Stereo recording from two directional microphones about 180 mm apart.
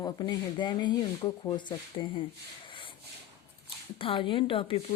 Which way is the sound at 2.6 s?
30° left (ahead or behind).